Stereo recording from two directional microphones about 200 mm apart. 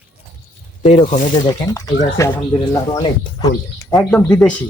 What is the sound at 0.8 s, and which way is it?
Speech, 35° left (ahead or behind).